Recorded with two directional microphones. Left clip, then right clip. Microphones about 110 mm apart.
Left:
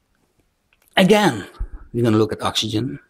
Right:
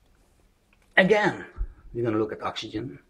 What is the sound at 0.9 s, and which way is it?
Speech, 45° left (ahead or behind).